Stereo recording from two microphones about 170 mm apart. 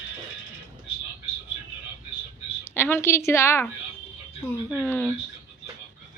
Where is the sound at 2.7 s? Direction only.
15° left (ahead or behind).